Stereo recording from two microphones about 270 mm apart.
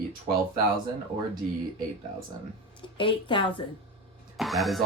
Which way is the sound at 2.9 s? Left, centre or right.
Centre.